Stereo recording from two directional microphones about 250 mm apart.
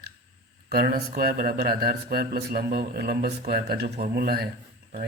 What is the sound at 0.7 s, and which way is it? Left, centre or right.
Speech, right.